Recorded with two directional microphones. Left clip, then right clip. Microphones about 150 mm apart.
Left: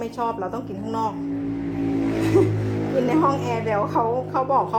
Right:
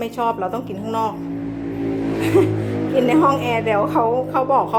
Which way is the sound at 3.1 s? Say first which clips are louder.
Right 5 dB; 15° right (ahead or behind).